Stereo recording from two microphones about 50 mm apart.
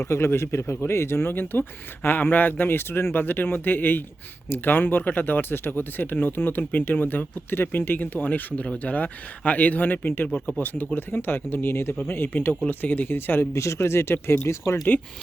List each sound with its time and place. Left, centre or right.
0.0 s speech: left
12.3 s speech: left
13.4 s speech: left
14.9 s speech: left